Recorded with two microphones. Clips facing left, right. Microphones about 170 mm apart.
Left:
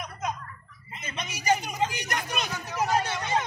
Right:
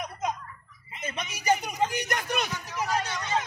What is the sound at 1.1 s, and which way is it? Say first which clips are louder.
A man's voice: even; 55° right (ahead or behind).